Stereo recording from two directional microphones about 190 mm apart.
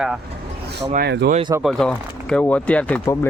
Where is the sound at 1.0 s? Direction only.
60° right (ahead or behind).